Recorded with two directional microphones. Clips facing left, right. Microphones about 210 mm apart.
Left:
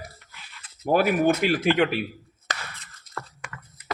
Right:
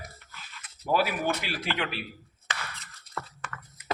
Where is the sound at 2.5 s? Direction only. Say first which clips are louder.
Left 3 dB; 40° left (ahead or behind).